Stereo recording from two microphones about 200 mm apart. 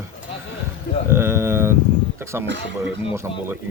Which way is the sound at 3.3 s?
25° left (ahead or behind).